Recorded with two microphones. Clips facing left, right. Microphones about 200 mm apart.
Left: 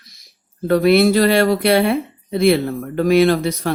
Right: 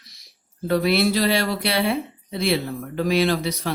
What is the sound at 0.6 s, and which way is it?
Speech, 55° left (ahead or behind).